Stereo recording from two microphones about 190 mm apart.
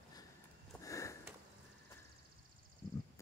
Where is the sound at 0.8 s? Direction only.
15° left (ahead or behind).